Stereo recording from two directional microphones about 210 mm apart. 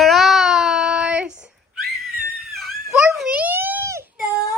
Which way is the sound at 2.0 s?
Centre (ahead or behind).